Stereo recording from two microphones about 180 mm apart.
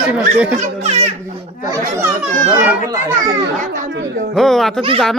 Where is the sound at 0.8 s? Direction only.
35° right (ahead or behind).